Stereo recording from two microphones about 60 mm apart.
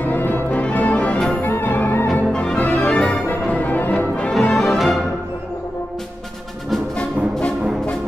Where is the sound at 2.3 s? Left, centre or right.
Centre.